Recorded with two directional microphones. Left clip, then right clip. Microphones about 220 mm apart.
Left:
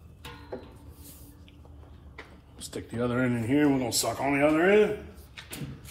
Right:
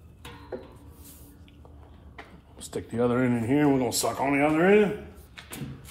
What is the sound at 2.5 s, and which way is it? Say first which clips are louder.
Speech: right 4 dB; 40° right (ahead or behind).